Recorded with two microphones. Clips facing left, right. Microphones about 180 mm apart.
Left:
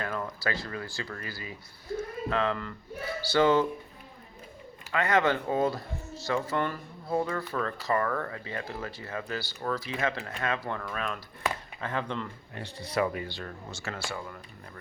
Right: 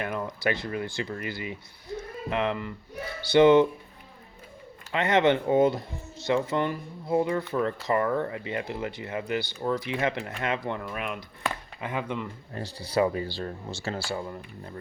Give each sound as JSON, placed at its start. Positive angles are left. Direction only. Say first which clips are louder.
{"t": 0.0, "sound": "speech", "louder": "right 4 dB", "side_deg": -20}
{"t": 4.9, "sound": "speech", "louder": "right 3 dB", "side_deg": -20}
{"t": 12.5, "sound": "speech", "louder": "right 4 dB", "side_deg": -35}